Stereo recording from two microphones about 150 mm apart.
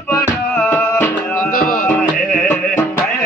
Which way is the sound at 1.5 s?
65° left (ahead or behind).